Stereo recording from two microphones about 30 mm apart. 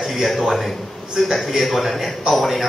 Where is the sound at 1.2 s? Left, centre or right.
Centre.